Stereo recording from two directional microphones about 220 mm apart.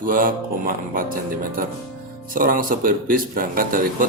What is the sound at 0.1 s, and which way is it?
Speech, 40° right (ahead or behind).